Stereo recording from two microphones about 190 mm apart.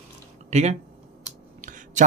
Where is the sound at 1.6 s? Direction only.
40° right (ahead or behind).